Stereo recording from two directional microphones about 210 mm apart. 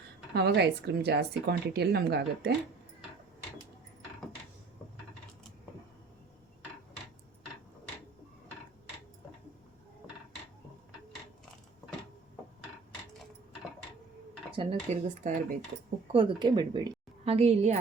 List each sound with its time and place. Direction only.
0.3 s a woman's voice: 50° right (ahead or behind)
14.5 s speech: 25° right (ahead or behind)
16.1 s a woman's voice: 20° right (ahead or behind)